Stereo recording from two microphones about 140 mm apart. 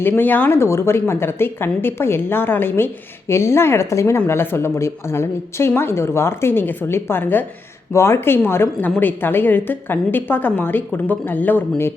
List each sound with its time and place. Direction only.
0.0 s speech: 15° left (ahead or behind)